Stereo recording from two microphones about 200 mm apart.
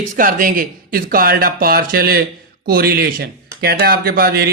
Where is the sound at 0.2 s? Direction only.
45° right (ahead or behind).